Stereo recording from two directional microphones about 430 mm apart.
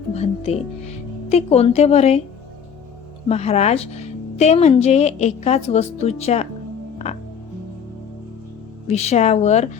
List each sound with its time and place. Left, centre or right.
0.1 s a woman's voice: centre
3.2 s a woman's voice: centre
8.9 s a woman's voice: centre